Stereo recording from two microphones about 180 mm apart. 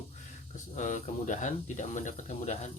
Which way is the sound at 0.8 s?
40° left (ahead or behind).